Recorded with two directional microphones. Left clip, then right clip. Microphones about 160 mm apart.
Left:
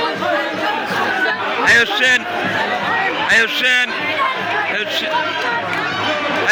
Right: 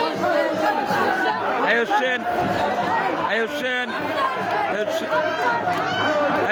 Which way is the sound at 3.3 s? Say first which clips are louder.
Left 9 dB; 20° right (ahead or behind).